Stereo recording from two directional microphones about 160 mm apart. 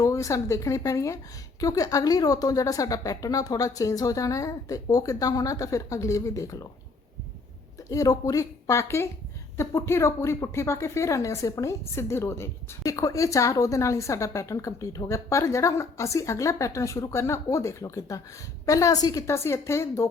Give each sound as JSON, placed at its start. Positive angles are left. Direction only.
{"t": 0.0, "sound": "a woman's voice", "side_deg": 20}
{"t": 7.9, "sound": "a woman's voice", "side_deg": 20}